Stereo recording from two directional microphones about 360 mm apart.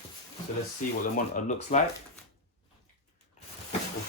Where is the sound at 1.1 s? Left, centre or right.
Left.